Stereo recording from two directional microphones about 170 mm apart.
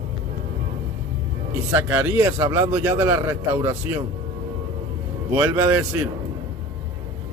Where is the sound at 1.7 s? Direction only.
10° right (ahead or behind).